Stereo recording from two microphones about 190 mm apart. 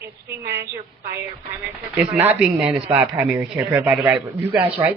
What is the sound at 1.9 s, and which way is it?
A man's voice, 10° right (ahead or behind).